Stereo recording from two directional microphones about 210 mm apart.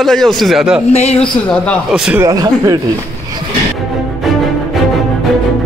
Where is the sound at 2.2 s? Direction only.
15° right (ahead or behind).